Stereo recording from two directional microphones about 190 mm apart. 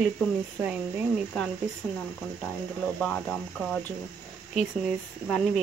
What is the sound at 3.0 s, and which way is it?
Speech, 5° left (ahead or behind).